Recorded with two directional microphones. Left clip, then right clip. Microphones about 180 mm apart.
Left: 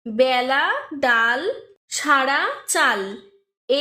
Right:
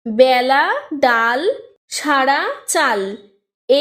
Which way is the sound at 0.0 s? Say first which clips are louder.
Right 6 dB; 40° right (ahead or behind).